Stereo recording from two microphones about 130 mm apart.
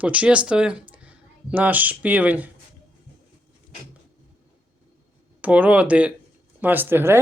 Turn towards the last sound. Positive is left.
turn(degrees=-15)  # may be behind; listen again after turning